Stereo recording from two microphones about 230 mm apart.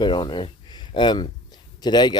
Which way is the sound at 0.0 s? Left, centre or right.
Centre.